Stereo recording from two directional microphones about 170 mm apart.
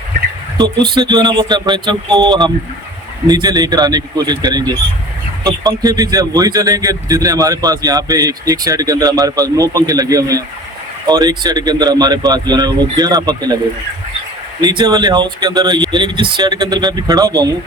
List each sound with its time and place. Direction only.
0.6 s speech: 25° right (ahead or behind)
14.6 s speech: 25° right (ahead or behind)